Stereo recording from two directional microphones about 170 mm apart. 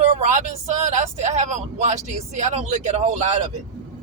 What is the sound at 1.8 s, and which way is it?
Speech, 45° right (ahead or behind).